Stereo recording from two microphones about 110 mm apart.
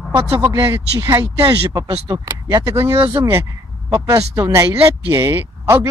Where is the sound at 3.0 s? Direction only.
50° right (ahead or behind).